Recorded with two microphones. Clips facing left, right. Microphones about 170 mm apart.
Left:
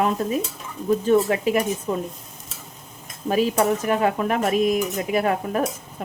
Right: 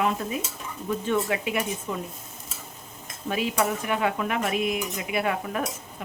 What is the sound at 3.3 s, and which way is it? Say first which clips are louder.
Speech: left 6 dB; 40° left (ahead or behind).